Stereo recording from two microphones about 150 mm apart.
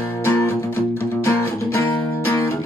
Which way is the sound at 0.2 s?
15° left (ahead or behind).